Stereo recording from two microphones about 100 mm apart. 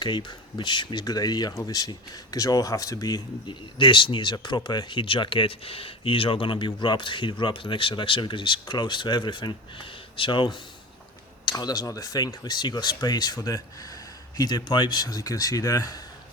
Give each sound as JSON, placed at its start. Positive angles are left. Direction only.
{"t": 0.0, "sound": "speech", "side_deg": 50}
{"t": 11.5, "sound": "speech", "side_deg": 40}